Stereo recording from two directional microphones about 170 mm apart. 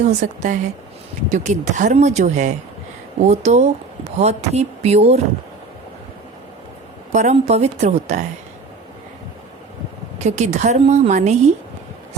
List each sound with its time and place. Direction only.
0.0 s a woman's voice: 45° right (ahead or behind)
7.1 s speech: 45° right (ahead or behind)
10.2 s a woman's voice: 40° right (ahead or behind)